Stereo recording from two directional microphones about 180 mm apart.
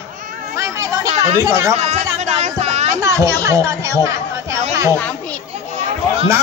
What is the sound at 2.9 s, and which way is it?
Speech, 20° right (ahead or behind).